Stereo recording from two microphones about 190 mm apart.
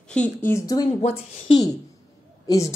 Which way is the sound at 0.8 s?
30° left (ahead or behind).